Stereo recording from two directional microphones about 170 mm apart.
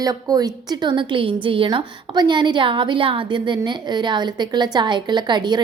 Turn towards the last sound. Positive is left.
turn(degrees=-25)  # may be behind; listen again after turning